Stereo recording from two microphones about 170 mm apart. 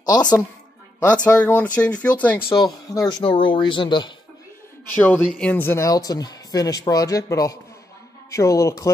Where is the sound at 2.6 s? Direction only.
25° left (ahead or behind).